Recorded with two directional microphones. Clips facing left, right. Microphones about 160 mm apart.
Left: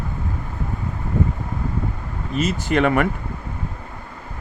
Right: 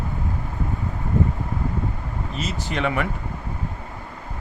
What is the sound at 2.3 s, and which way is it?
Speech, 50° left (ahead or behind).